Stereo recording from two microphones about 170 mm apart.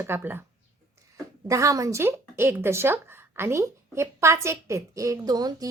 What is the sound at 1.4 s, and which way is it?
A woman's voice, 20° right (ahead or behind).